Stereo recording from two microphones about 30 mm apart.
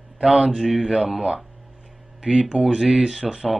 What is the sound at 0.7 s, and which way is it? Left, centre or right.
Speech, centre.